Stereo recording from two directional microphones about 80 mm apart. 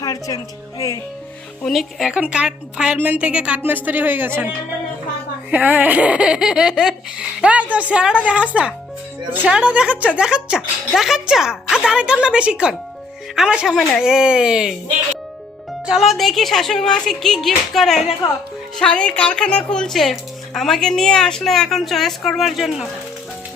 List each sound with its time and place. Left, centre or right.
0.0 s music: left
0.8 s speech: left
1.6 s a woman's voice: centre
2.1 s speech: centre
5.5 s speech: right
7.4 s speech: centre
15.9 s a woman's voice: centre
18.8 s a woman's voice: centre